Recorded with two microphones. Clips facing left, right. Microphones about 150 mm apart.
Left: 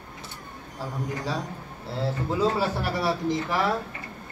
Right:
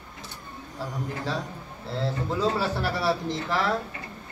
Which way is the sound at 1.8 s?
10° left (ahead or behind).